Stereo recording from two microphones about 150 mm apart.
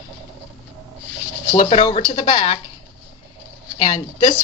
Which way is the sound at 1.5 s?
45° left (ahead or behind).